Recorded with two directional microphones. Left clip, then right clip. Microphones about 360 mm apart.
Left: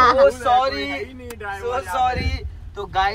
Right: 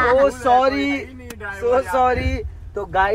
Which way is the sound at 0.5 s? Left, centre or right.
Right.